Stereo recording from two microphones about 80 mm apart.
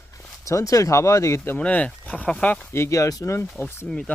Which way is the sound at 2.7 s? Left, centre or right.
Left.